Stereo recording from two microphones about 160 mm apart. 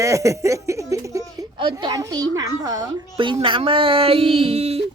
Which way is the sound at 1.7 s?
20° right (ahead or behind).